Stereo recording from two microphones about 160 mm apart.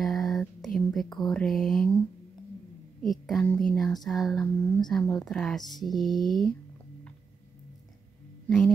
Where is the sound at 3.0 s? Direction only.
Centre (ahead or behind).